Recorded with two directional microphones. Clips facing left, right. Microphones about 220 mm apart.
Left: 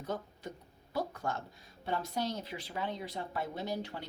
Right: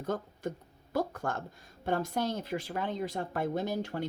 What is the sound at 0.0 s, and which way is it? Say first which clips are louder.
Speech: right 5 dB; 50° right (ahead or behind).